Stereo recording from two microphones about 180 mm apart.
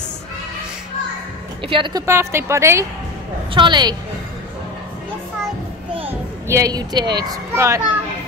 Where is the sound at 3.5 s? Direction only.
25° right (ahead or behind).